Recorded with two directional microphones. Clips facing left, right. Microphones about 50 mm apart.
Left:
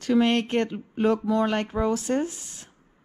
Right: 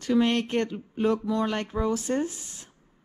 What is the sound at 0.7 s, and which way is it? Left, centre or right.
Speech, left.